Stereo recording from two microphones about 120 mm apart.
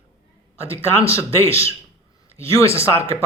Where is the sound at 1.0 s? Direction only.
50° right (ahead or behind).